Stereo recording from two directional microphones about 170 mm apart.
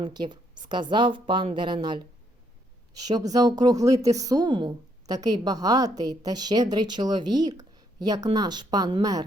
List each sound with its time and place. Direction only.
0.0 s speech: 25° right (ahead or behind)
3.1 s speech: 20° right (ahead or behind)